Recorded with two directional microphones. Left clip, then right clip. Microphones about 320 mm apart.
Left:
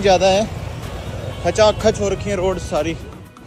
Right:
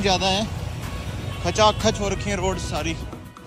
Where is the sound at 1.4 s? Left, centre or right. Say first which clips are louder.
Left 5 dB; centre.